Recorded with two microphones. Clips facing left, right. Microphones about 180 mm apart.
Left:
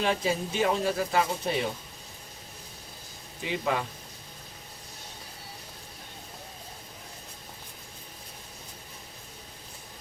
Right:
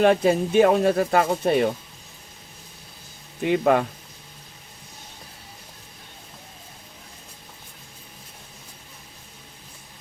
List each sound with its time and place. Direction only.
0.0 s speech: 55° right (ahead or behind)
3.4 s speech: 55° right (ahead or behind)